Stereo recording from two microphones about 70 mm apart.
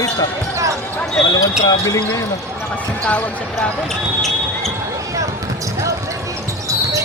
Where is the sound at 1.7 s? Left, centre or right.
Left.